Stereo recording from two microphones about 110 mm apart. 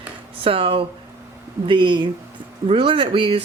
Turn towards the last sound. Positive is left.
turn(degrees=-55)  # may be behind; listen again after turning